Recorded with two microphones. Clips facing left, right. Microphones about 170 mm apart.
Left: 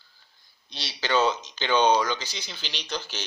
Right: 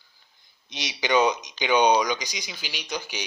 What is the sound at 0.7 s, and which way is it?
Speech, 15° right (ahead or behind).